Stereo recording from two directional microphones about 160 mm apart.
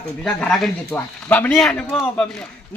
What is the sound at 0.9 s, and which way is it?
Speech, 10° left (ahead or behind).